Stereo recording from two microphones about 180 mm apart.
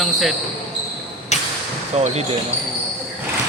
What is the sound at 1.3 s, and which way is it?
Basketball bounce, 40° left (ahead or behind).